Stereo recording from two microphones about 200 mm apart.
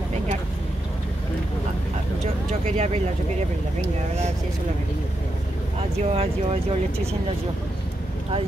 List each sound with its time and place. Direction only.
2.6 s speech: 35° right (ahead or behind)
5.8 s speech: 30° right (ahead or behind)